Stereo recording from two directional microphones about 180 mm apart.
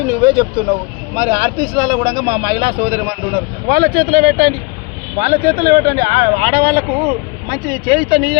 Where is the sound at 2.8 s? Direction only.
60° right (ahead or behind).